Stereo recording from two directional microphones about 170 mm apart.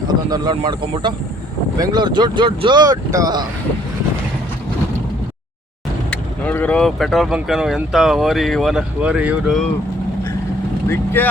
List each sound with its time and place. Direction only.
0.1 s speech: 25° right (ahead or behind)
6.1 s speech: 10° left (ahead or behind); by 9.6 s 5° right (ahead or behind)
10.8 s speech: 10° left (ahead or behind)